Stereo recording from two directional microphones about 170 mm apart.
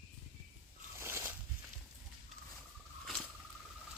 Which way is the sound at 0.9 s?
15° right (ahead or behind).